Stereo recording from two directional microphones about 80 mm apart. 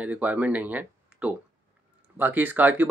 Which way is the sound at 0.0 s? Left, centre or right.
Centre.